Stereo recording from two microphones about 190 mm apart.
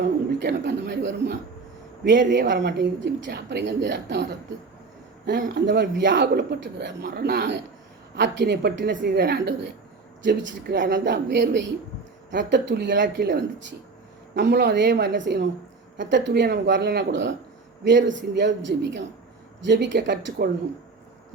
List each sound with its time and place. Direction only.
0.4 s a man's voice: 65° right (ahead or behind)
5.2 s a man's voice: 50° right (ahead or behind)
11.0 s a woman's voice: 70° right (ahead or behind)